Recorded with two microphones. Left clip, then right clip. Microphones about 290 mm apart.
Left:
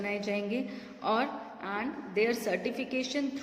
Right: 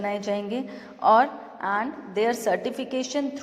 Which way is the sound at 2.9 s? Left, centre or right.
Centre.